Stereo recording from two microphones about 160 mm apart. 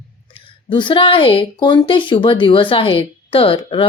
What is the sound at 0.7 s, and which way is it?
Speech, 30° left (ahead or behind).